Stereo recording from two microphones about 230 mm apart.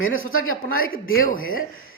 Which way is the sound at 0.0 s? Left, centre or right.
Left.